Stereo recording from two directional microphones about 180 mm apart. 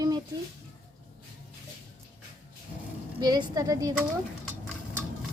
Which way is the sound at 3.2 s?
20° right (ahead or behind).